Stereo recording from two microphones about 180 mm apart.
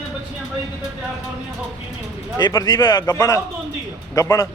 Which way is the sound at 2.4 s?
20° left (ahead or behind).